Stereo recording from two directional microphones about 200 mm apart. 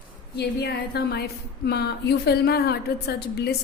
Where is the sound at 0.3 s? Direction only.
55° left (ahead or behind).